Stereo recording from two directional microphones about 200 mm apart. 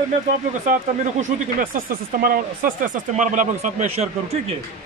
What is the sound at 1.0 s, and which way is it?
Speech, 40° right (ahead or behind).